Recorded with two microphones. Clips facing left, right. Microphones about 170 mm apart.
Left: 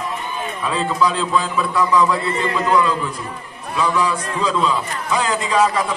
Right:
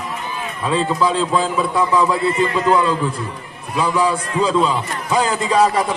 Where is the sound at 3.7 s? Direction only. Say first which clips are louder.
Right 2 dB; 30° right (ahead or behind).